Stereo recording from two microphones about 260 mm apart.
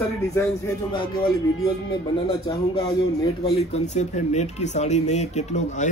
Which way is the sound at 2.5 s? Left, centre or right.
Centre.